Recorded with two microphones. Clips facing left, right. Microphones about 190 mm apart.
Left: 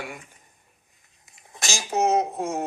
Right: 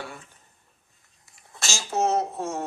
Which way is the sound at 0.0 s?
15° left (ahead or behind).